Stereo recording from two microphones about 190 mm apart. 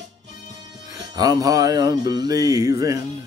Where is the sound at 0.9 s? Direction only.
20° right (ahead or behind).